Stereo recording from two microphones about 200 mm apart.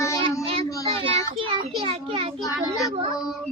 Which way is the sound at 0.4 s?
30° right (ahead or behind).